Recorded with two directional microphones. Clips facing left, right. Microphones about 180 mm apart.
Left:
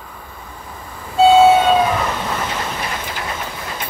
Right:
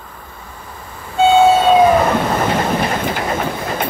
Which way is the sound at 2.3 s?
50° right (ahead or behind).